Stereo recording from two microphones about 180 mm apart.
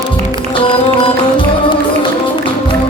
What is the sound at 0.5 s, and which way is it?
Music, 30° left (ahead or behind).